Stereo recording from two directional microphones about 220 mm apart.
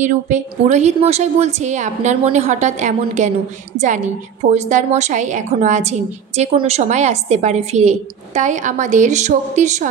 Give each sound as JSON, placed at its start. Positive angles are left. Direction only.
{"t": 0.0, "sound": "a woman's voice", "side_deg": -35}